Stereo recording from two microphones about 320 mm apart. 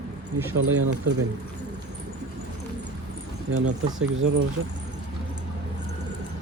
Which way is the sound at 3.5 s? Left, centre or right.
Right.